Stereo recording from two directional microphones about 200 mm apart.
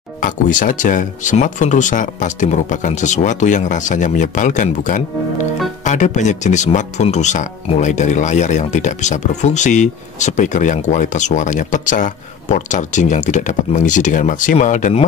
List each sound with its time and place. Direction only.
0.2 s speech: 40° left (ahead or behind)